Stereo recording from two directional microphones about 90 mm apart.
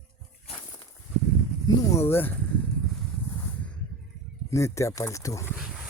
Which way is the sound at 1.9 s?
25° left (ahead or behind).